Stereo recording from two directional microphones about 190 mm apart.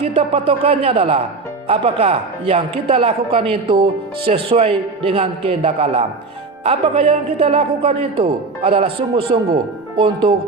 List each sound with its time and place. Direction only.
0.0 s a man's voice: 30° right (ahead or behind)